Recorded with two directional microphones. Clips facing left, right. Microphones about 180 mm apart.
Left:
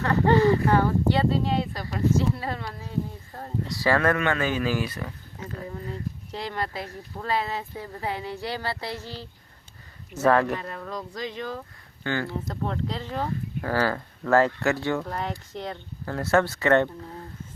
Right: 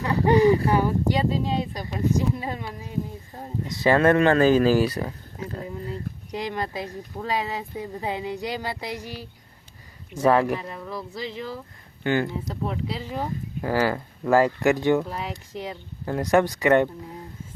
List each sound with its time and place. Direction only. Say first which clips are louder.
0.0 s speech: right 2 dB; 15° right (ahead or behind); by 5.6 s 35° right (ahead or behind)
6.3 s speech: right 3 dB; 15° right (ahead or behind)
12.0 s speech: right 4 dB; 15° right (ahead or behind)
12.6 s speech: right 1 dB; 5° right (ahead or behind)